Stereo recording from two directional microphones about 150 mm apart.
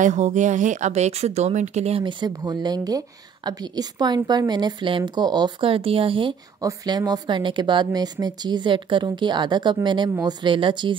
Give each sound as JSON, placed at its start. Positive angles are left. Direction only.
{"t": 0.0, "sound": "a woman's voice", "side_deg": -50}
{"t": 6.6, "sound": "speech", "side_deg": -25}